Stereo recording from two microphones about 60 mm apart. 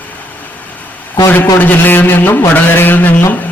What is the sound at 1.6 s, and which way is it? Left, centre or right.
A man's voice, left.